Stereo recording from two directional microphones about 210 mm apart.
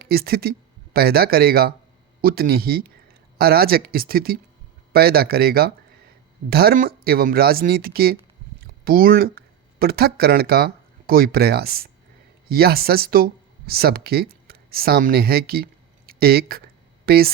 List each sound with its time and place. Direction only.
0.0 s speech: 45° right (ahead or behind)